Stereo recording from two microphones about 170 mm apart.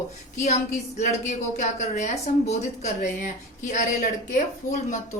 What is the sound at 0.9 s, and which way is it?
Speech, 45° left (ahead or behind).